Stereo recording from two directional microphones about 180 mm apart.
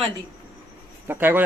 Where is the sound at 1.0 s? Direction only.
10° right (ahead or behind).